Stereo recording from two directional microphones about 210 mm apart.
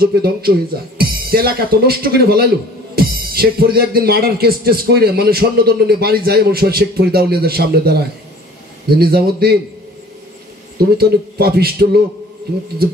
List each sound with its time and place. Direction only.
0.0 s speech: 45° right (ahead or behind)
11.0 s speech: 45° right (ahead or behind)